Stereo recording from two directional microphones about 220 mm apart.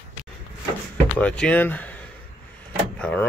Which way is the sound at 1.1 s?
5° left (ahead or behind).